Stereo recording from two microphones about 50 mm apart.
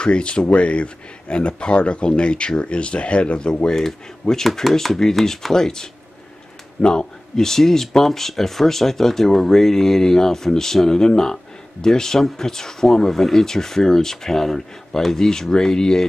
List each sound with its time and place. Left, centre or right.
0.0 s speech: left
3.6 s speech: centre